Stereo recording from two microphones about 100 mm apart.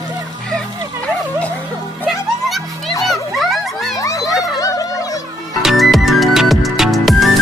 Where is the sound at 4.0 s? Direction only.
35° left (ahead or behind).